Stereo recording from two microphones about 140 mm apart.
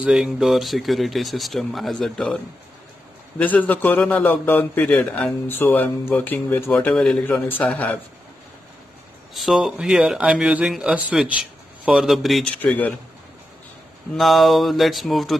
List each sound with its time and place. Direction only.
0.0 s speech: 5° right (ahead or behind)
3.3 s a man's voice: 10° left (ahead or behind)
9.3 s speech: centre (ahead or behind)
14.1 s speech: centre (ahead or behind)